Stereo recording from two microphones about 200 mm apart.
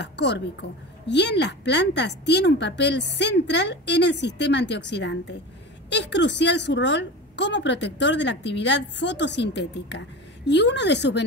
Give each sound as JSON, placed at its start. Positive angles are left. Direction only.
{"t": 0.0, "sound": "a woman's voice", "side_deg": 60}